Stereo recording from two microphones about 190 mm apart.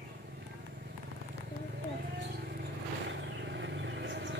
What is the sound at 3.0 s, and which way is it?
Vehicle, 65° right (ahead or behind).